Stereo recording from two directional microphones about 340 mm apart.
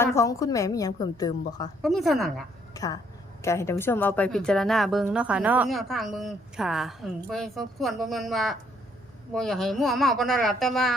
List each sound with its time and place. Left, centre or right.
0.0 s a woman's voice: centre
1.8 s a woman's voice: centre
2.7 s a woman's voice: centre